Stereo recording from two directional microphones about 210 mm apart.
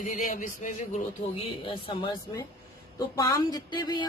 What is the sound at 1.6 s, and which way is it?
Speech, 25° left (ahead or behind).